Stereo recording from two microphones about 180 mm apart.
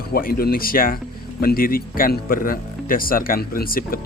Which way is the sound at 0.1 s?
55° left (ahead or behind).